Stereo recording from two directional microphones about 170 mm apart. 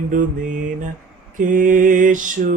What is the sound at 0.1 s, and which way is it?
Mantra, 50° right (ahead or behind).